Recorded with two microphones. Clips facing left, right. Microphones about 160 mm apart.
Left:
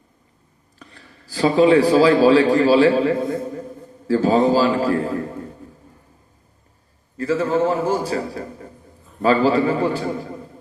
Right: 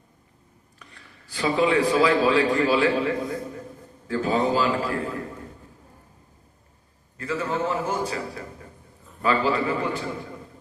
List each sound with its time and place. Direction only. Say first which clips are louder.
0.8 s speech: left 6 dB; 35° left (ahead or behind)
4.1 s a man's voice: left 7 dB; 35° left (ahead or behind)
7.2 s a man's voice: left 8 dB; 35° left (ahead or behind)